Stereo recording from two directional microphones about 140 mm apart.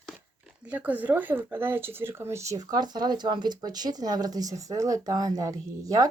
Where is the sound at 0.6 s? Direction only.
10° right (ahead or behind).